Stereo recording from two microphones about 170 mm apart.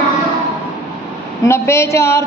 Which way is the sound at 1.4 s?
15° left (ahead or behind).